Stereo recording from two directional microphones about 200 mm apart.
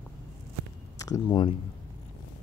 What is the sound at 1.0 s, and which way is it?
Speech, 20° left (ahead or behind).